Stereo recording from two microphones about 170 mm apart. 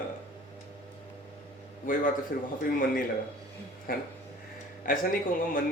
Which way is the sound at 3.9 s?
60° left (ahead or behind).